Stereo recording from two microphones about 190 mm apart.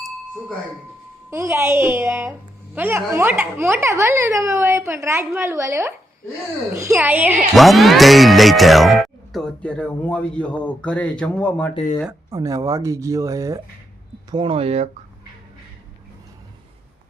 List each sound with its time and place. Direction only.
1.3 s speech: 15° right (ahead or behind); by 11.7 s 5° left (ahead or behind)
11.7 s speech: 35° left (ahead or behind)
12.3 s speech: 15° right (ahead or behind); by 14.8 s 35° right (ahead or behind)